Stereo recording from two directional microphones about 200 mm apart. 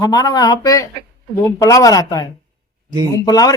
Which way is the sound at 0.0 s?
20° left (ahead or behind).